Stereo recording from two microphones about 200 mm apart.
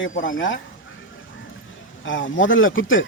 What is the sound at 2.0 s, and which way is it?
A man's voice, 70° left (ahead or behind).